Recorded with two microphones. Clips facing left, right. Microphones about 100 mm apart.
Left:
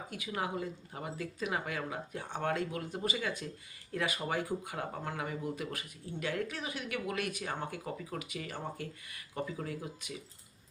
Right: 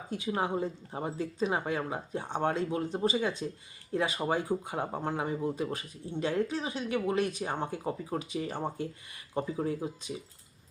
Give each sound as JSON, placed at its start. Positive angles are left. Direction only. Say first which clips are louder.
{"t": 0.3, "sound": "speech", "louder": "right 6 dB", "side_deg": -30}